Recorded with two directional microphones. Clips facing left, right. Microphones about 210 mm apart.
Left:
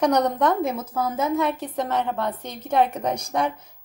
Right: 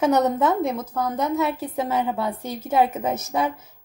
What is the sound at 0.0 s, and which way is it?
A woman's voice, 5° right (ahead or behind).